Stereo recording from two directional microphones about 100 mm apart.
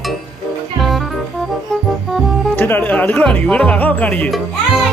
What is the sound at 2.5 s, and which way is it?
Speech, 20° left (ahead or behind).